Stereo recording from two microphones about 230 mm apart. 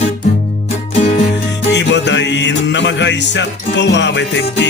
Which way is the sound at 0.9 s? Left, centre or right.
Left.